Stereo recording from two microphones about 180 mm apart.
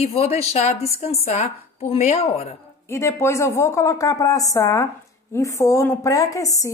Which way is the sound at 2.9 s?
15° left (ahead or behind).